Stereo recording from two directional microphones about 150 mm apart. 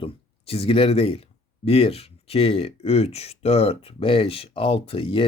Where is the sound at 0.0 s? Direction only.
40° left (ahead or behind).